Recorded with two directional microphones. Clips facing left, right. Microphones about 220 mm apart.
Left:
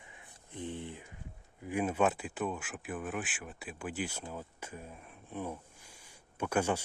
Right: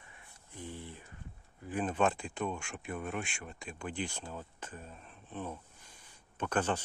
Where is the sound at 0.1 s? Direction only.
20° left (ahead or behind).